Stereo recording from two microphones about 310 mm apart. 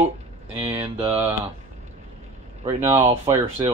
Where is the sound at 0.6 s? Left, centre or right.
Centre.